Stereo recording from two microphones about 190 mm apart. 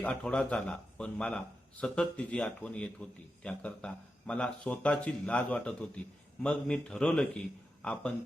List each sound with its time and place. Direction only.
0.0 s speech: 5° left (ahead or behind)